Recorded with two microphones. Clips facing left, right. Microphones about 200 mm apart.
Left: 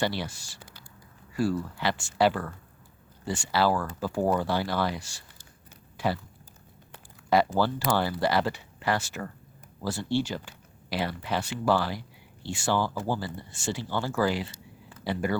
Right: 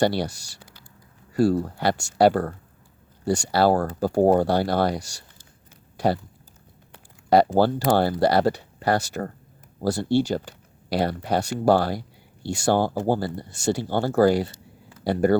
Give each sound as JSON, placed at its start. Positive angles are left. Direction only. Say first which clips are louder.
{"t": 0.0, "sound": "speech", "louder": "right 8 dB", "side_deg": -40}
{"t": 7.3, "sound": "speech", "louder": "right 6 dB", "side_deg": -40}
{"t": 12.8, "sound": "speech", "louder": "right 7 dB", "side_deg": -55}
{"t": 13.3, "sound": "speech", "louder": "right 8 dB", "side_deg": -40}